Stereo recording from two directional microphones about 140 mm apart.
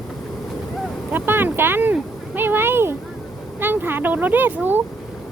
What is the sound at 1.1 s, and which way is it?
Speech, 15° right (ahead or behind).